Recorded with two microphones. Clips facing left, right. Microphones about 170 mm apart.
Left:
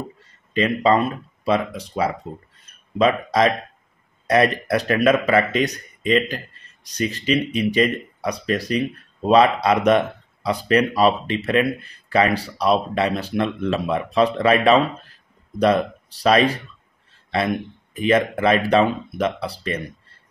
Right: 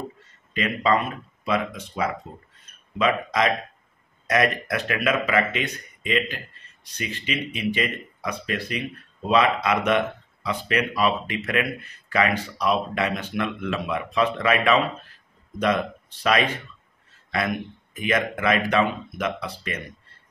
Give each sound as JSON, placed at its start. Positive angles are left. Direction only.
{"t": 0.5, "sound": "speech", "side_deg": 30}